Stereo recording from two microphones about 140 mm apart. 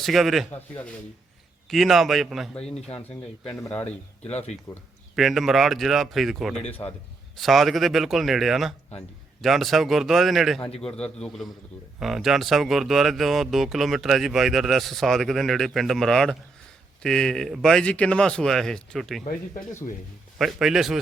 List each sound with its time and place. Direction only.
0.0 s speech: centre (ahead or behind)
1.7 s speech: centre (ahead or behind)
2.7 s a man's voice: 50° left (ahead or behind)
3.0 s speech: 15° left (ahead or behind)
4.7 s speech: 35° left (ahead or behind)
5.1 s speech: centre (ahead or behind)
6.7 s speech: 10° left (ahead or behind)
7.3 s speech: centre (ahead or behind)
10.6 s a man's voice: 45° left (ahead or behind)
10.9 s speech: 5° left (ahead or behind)
20.4 s speech: 5° right (ahead or behind)